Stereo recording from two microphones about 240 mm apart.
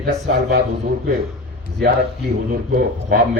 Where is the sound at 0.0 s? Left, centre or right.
Right.